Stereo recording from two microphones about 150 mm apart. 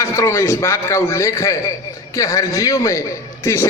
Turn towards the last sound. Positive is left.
turn(degrees=20)  # may be behind; listen again after turning